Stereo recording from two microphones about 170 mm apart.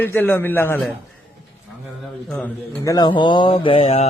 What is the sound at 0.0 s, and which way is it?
Speech, 10° left (ahead or behind).